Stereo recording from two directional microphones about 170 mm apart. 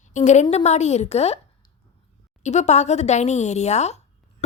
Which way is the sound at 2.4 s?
45° left (ahead or behind).